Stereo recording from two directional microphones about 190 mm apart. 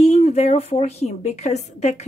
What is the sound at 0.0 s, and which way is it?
Speech, 35° left (ahead or behind).